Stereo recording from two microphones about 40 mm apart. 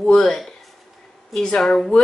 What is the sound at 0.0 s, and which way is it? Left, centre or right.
A woman's voice, centre.